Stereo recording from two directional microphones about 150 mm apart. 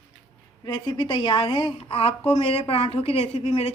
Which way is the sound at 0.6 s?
30° left (ahead or behind).